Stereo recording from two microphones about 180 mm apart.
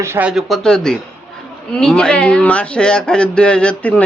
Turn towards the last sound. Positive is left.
turn(degrees=5)  # may be behind; listen again after turning